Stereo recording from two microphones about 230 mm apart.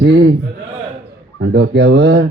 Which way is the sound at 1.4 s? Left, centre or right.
Right.